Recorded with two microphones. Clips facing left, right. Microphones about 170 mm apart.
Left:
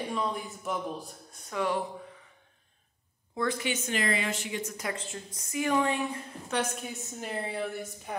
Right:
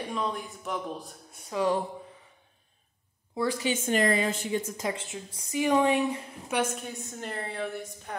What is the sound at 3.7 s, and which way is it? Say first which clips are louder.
A woman's voice: right 5 dB; 45° right (ahead or behind).